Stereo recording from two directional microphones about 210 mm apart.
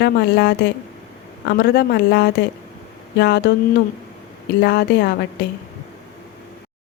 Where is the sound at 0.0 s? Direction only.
50° left (ahead or behind).